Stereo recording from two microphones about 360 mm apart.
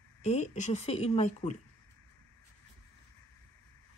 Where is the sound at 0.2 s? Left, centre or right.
Centre.